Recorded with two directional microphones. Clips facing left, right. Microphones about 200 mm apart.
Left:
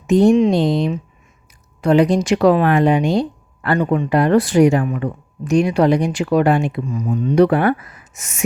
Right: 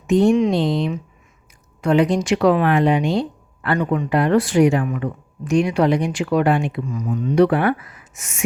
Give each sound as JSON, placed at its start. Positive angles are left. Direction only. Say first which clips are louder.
{"t": 0.1, "sound": "speech", "louder": "left 3 dB", "side_deg": 40}
{"t": 0.5, "sound": "speech", "louder": "left 3 dB", "side_deg": 45}